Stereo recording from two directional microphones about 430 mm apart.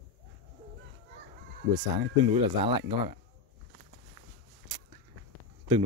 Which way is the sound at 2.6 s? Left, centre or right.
Centre.